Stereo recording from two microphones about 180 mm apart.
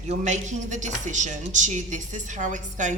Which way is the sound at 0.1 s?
40° right (ahead or behind).